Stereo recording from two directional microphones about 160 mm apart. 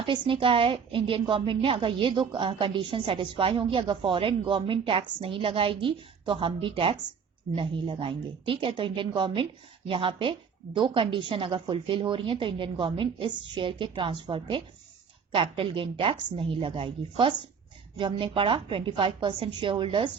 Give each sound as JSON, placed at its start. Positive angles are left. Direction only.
{"t": 0.0, "sound": "a woman's voice", "side_deg": -30}